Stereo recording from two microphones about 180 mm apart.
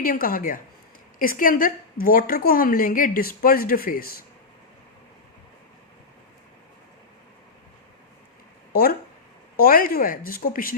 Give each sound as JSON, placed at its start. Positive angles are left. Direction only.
{"t": 0.0, "sound": "a woman's voice", "side_deg": 50}
{"t": 9.6, "sound": "a woman's voice", "side_deg": 55}